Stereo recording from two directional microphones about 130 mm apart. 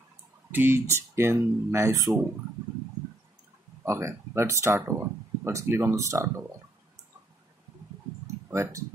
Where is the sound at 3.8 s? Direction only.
20° right (ahead or behind).